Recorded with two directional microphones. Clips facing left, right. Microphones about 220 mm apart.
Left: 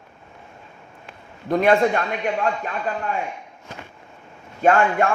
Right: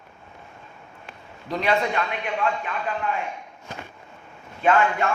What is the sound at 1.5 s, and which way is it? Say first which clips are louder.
A man's voice: left 7 dB; 50° left (ahead or behind).